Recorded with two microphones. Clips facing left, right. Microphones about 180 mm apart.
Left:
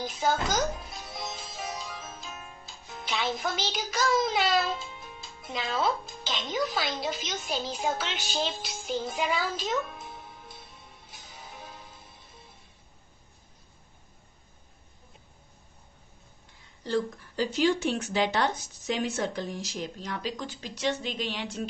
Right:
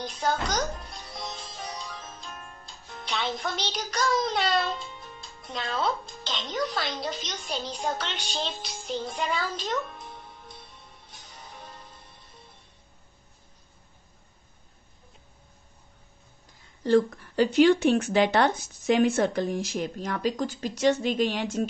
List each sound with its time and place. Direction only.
0.0 s music: 5° left (ahead or behind)
3.9 s speech: 5° left (ahead or behind)
16.8 s speech: 60° right (ahead or behind)